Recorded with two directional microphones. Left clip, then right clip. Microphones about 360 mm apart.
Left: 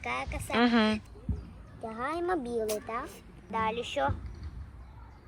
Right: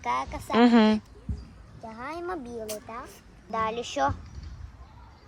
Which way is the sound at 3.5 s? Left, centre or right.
Centre.